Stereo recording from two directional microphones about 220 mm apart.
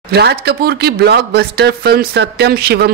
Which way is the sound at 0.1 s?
45° right (ahead or behind).